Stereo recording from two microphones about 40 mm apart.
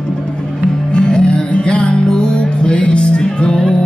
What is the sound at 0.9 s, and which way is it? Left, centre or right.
Music, left.